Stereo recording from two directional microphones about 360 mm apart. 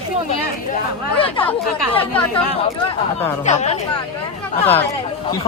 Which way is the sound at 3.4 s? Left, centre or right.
Centre.